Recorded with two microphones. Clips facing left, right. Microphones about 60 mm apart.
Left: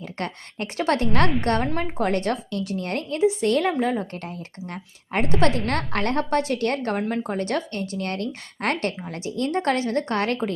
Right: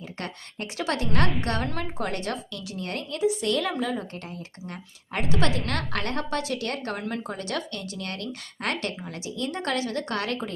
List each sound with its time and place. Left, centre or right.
0.2 s a woman's voice: left